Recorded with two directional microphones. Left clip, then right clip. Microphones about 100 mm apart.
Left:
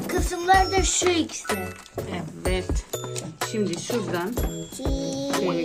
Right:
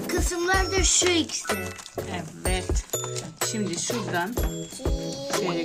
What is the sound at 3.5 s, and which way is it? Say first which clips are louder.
Music: left 3 dB; 15° right (ahead or behind).